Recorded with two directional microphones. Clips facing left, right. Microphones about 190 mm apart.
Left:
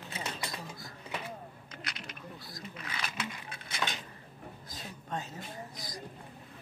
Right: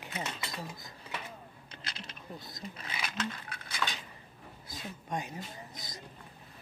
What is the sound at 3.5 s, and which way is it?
Dishes, 20° left (ahead or behind).